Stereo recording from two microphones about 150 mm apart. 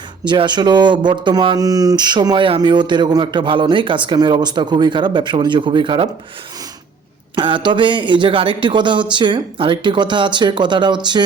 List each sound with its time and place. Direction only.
0.3 s speech: 30° right (ahead or behind)
7.3 s speech: 30° right (ahead or behind)